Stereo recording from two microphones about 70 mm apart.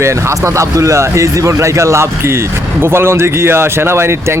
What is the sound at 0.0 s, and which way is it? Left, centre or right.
Speech, right.